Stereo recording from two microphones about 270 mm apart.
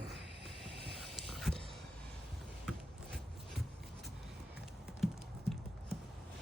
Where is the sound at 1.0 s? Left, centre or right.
Centre.